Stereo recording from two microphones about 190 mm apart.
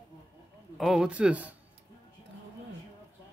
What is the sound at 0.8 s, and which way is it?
Speech, 5° right (ahead or behind).